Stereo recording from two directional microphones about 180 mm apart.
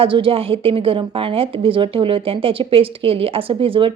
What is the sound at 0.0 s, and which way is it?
A woman's voice, 30° right (ahead or behind).